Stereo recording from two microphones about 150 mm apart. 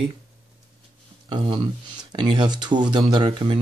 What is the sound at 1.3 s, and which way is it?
Speech, 35° right (ahead or behind).